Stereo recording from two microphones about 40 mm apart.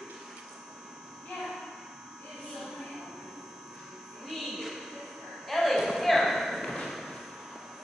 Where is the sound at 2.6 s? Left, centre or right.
Centre.